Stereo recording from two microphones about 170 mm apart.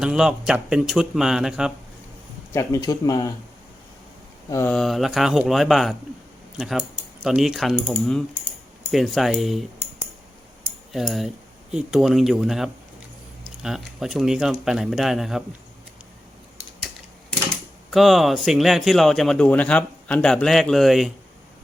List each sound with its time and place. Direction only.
0.0 s speech: 5° right (ahead or behind)
2.5 s speech: 20° left (ahead or behind)
4.4 s speech: 15° left (ahead or behind)
4.7 s speech: centre (ahead or behind)
10.9 s speech: centre (ahead or behind)
17.9 s speech: centre (ahead or behind)